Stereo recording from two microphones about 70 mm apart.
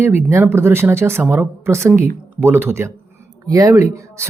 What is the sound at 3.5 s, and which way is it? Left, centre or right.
Speech, right.